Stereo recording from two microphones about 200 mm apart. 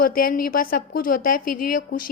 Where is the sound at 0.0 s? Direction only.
45° left (ahead or behind).